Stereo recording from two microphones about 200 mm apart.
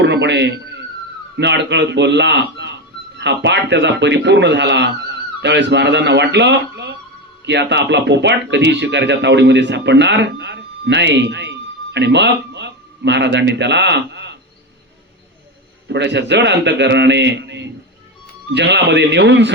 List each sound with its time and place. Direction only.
0.0 s a man's voice: 60° right (ahead or behind)
15.9 s speech: 60° right (ahead or behind)